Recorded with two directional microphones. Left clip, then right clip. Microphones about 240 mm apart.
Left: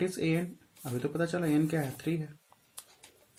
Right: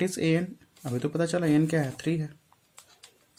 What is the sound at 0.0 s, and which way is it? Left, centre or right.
Speech, right.